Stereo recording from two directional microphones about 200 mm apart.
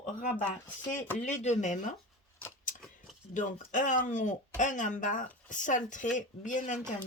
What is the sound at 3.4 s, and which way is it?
Speech, 40° left (ahead or behind).